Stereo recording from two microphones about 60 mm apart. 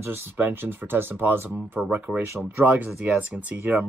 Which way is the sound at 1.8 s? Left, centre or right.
Right.